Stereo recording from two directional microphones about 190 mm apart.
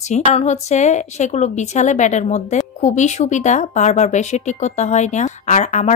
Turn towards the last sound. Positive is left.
turn(degrees=40)  # may be behind; listen again after turning